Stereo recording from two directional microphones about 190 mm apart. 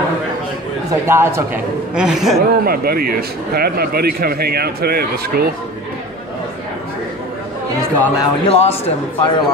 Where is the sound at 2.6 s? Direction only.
55° right (ahead or behind).